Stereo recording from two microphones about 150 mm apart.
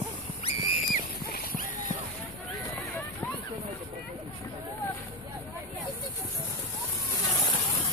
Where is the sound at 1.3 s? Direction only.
65° left (ahead or behind).